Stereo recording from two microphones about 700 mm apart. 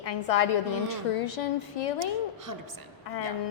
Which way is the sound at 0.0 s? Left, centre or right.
Left.